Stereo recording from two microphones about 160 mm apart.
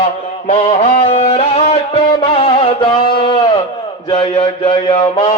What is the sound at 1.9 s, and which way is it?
Music, 30° left (ahead or behind).